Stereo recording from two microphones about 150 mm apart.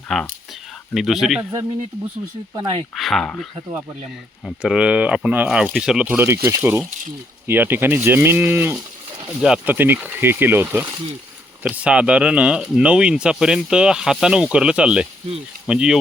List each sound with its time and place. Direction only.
0.1 s speech: centre (ahead or behind)
2.6 s speech: 35° right (ahead or behind)
2.9 s speech: centre (ahead or behind)
4.4 s speech: 5° right (ahead or behind)